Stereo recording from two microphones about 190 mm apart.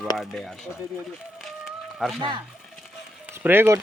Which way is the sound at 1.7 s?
Centre (ahead or behind).